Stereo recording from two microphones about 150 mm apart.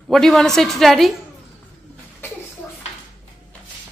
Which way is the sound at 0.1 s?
Centre (ahead or behind).